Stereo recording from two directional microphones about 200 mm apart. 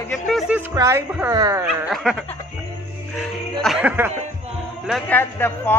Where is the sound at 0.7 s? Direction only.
15° right (ahead or behind).